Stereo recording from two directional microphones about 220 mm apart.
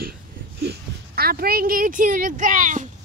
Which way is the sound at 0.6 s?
45° right (ahead or behind).